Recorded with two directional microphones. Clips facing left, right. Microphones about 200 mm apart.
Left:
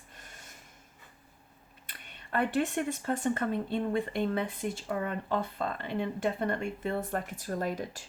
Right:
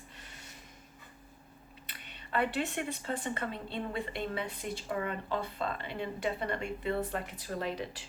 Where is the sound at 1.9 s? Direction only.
50° left (ahead or behind).